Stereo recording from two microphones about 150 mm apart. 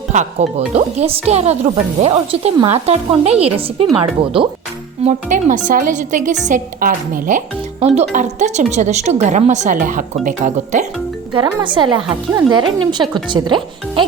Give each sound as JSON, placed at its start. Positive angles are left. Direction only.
{"t": 0.1, "sound": "speech", "side_deg": -50}
{"t": 5.0, "sound": "a woman's voice", "side_deg": -60}
{"t": 11.3, "sound": "speech", "side_deg": -30}